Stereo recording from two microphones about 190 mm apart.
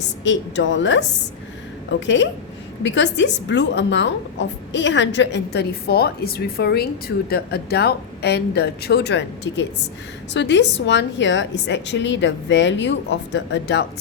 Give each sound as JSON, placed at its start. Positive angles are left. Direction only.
{"t": 0.3, "sound": "a woman's voice", "side_deg": 70}